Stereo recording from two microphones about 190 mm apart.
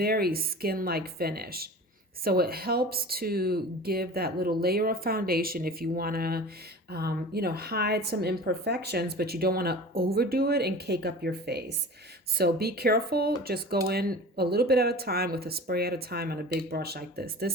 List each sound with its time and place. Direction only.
0.0 s a woman's voice: 55° right (ahead or behind)